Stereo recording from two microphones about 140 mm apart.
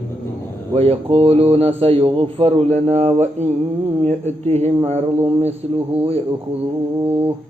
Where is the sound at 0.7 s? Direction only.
45° right (ahead or behind).